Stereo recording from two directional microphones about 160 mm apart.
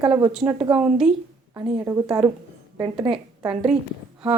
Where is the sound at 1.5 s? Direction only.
20° right (ahead or behind).